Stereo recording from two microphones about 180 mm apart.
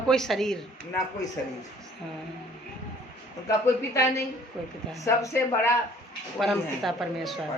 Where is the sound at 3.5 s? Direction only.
15° left (ahead or behind).